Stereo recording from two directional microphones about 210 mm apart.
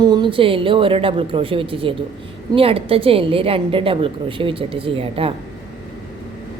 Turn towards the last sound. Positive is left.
turn(degrees=-25)  # may be behind; listen again after turning